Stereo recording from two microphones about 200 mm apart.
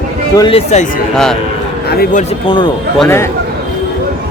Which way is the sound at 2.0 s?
40° left (ahead or behind).